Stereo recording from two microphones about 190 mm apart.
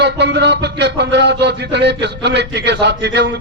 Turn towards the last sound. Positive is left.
turn(degrees=-65)  # may be behind; listen again after turning